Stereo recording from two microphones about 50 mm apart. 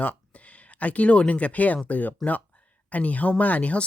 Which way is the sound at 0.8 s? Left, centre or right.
Left.